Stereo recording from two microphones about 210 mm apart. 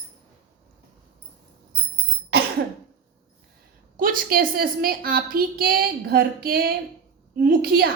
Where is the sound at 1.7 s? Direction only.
45° right (ahead or behind).